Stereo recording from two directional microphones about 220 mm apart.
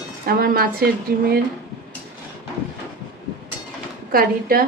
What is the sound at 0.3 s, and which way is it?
Speech, 45° right (ahead or behind).